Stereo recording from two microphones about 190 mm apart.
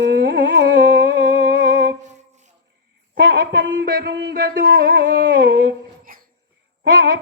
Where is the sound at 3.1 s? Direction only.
65° right (ahead or behind); by 4.9 s 50° right (ahead or behind).